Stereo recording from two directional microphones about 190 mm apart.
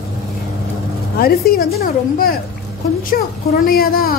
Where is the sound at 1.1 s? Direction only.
50° left (ahead or behind).